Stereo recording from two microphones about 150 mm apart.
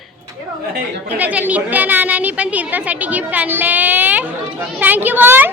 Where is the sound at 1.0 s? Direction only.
10° right (ahead or behind).